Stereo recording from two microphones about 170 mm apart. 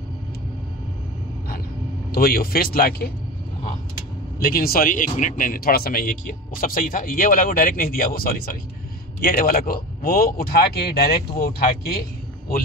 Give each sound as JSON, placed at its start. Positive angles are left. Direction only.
{"t": 2.1, "sound": "a man's voice", "side_deg": 60}
{"t": 4.4, "sound": "a man's voice", "side_deg": 60}